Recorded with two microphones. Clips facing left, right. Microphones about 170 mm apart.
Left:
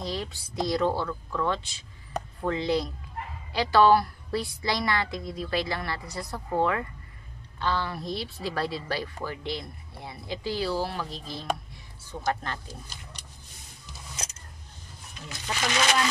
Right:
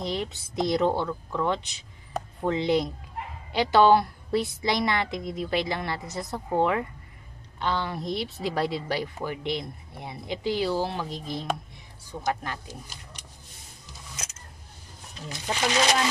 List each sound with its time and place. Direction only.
0.0 s a woman's voice: 20° right (ahead or behind)
15.2 s speech: 35° right (ahead or behind)